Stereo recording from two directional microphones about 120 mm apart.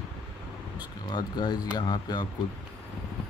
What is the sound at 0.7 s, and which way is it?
Speech, 35° left (ahead or behind).